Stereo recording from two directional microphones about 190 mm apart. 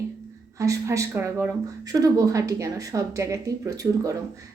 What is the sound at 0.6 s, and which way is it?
Speech, 15° right (ahead or behind).